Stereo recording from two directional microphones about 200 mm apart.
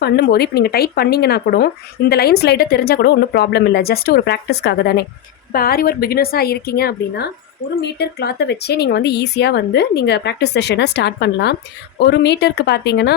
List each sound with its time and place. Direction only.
0.0 s speech: 55° left (ahead or behind)